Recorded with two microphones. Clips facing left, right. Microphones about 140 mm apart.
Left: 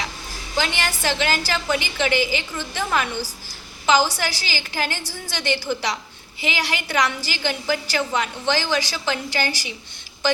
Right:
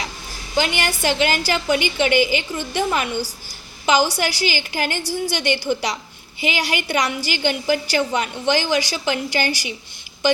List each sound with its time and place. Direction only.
0.5 s a woman's voice: 20° right (ahead or behind)